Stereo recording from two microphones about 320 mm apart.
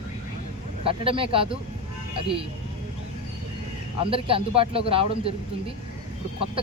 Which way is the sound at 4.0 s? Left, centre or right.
Centre.